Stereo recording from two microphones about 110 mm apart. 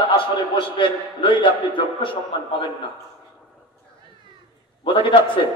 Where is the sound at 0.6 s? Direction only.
50° left (ahead or behind).